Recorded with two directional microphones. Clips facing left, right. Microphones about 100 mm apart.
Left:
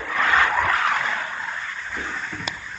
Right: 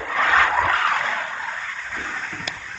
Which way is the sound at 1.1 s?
90° right.